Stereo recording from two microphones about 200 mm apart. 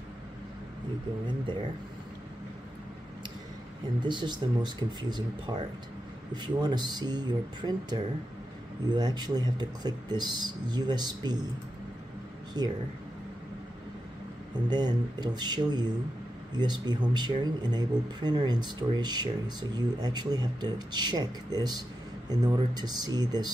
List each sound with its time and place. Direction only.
4.0 s speech: 20° right (ahead or behind)
12.6 s speech: 20° right (ahead or behind)
14.7 s speech: 20° right (ahead or behind)